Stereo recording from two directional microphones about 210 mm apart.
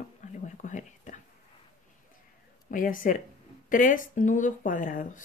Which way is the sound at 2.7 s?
40° left (ahead or behind).